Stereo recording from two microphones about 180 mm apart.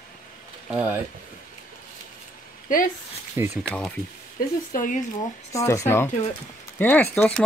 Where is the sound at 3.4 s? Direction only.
15° right (ahead or behind).